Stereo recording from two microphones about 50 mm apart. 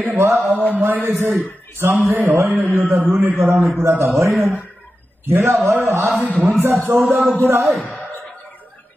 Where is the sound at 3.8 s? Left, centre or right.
Right.